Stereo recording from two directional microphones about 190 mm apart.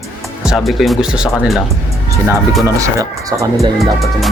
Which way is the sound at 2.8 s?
15° right (ahead or behind).